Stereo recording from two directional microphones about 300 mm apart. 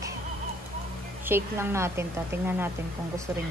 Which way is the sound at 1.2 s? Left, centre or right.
Centre.